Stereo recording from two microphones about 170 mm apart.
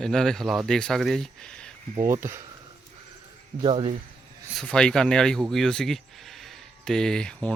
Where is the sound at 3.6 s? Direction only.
30° right (ahead or behind).